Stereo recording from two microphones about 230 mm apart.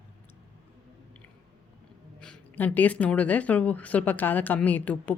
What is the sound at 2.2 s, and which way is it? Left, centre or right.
Speech, centre.